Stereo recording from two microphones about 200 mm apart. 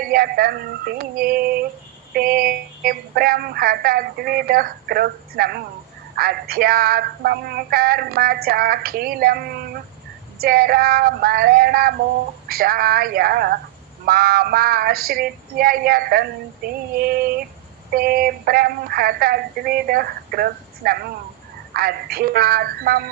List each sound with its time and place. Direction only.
0.1 s a woman's voice: 50° right (ahead or behind)